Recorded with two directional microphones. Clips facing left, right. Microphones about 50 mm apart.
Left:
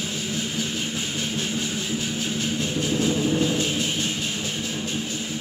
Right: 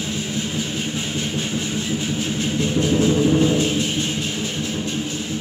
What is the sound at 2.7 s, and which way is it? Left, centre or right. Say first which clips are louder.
Music: right 6 dB; right.